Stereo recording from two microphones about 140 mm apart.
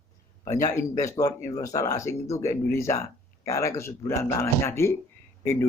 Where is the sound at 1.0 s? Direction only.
25° left (ahead or behind).